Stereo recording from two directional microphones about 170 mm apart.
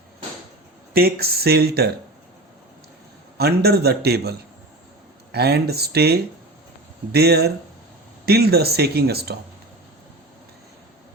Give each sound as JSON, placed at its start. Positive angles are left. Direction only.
{"t": 0.9, "sound": "speech", "side_deg": -65}
{"t": 3.3, "sound": "speech", "side_deg": -70}